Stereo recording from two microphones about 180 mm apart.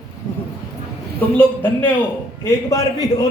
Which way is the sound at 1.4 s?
10° left (ahead or behind).